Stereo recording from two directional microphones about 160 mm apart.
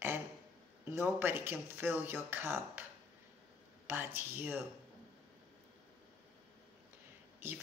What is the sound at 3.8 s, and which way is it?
Speech, 15° right (ahead or behind).